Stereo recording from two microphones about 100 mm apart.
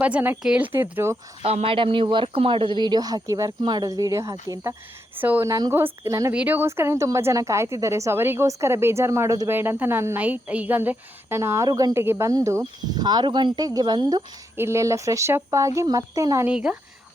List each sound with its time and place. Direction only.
0.0 s a woman's voice: 15° right (ahead or behind)
0.7 s a woman's voice: 20° right (ahead or behind)
1.4 s speech: 80° right; by 3.5 s 35° right (ahead or behind)
3.6 s speech: 45° right (ahead or behind)
5.1 s a woman's voice: 20° right (ahead or behind)
5.5 s speech: 40° right (ahead or behind)
5.7 s a woman's voice: 25° right (ahead or behind)
6.3 s a woman's voice: 15° right (ahead or behind); by 9.5 s 35° right (ahead or behind)
9.5 s a woman's voice: 20° right (ahead or behind)
11.7 s speech: 45° right (ahead or behind)
11.9 s a woman's voice: 25° right (ahead or behind)
12.9 s speech: 45° right (ahead or behind)
14.5 s speech: 25° right (ahead or behind)
16.5 s a woman's voice: 10° right (ahead or behind)